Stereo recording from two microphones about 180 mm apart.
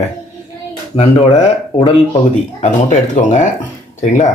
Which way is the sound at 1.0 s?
35° left (ahead or behind).